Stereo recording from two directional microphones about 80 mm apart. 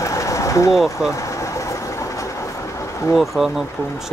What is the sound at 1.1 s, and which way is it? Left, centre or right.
Vehicle, left.